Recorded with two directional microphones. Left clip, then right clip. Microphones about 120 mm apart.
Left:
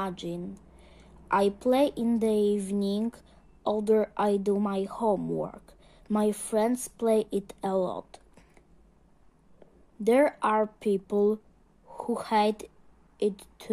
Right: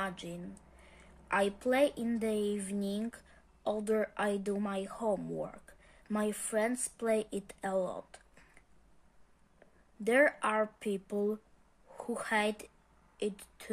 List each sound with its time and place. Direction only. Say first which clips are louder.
0.0 s a woman's voice: left 5 dB; 30° left (ahead or behind)
7.9 s a sound: left 6 dB; 25° left (ahead or behind)
10.0 s speech: left 5 dB; 30° left (ahead or behind)